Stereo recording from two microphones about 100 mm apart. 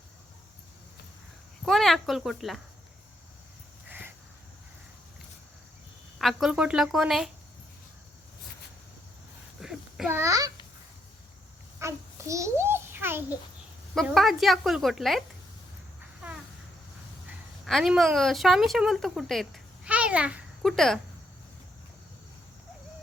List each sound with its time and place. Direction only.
1.6 s speech: 5° left (ahead or behind)
3.8 s crow: 20° right (ahead or behind)
6.1 s speech: centre (ahead or behind)
9.6 s child singing: 5° right (ahead or behind)
10.1 s a child's voice: 25° right (ahead or behind)
11.8 s a sound: 30° right (ahead or behind)
13.9 s speech: centre (ahead or behind)
17.7 s speech: centre (ahead or behind)
19.8 s babbling: 10° right (ahead or behind)
20.6 s speech: centre (ahead or behind)